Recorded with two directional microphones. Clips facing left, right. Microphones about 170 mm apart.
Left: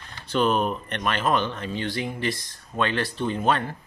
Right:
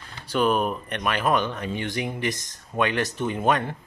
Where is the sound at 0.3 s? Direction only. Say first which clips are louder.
Even; 10° right (ahead or behind).